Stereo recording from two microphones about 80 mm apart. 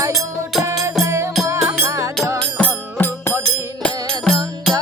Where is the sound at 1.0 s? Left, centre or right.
Right.